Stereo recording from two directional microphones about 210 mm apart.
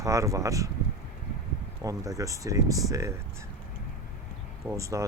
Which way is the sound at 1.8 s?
15° right (ahead or behind).